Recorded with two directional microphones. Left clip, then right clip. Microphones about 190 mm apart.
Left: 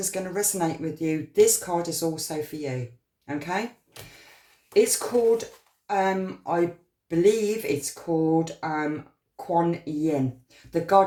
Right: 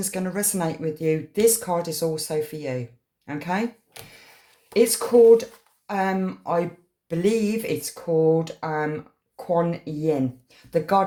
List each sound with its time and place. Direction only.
0.0 s speech: 40° right (ahead or behind)
4.7 s speech: 40° right (ahead or behind)